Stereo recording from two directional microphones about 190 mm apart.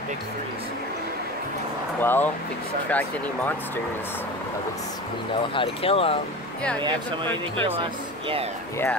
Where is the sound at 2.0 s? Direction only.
10° left (ahead or behind).